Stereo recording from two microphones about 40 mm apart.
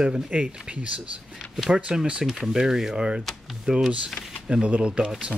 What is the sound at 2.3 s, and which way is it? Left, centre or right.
Speech, centre.